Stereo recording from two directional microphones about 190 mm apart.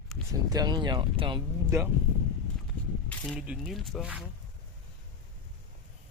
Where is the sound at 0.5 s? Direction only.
20° right (ahead or behind).